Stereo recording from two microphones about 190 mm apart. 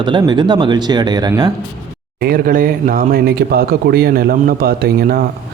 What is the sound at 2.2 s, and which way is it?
Speech, 50° right (ahead or behind).